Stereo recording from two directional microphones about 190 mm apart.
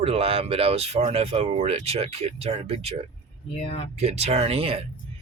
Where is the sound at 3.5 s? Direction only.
35° left (ahead or behind).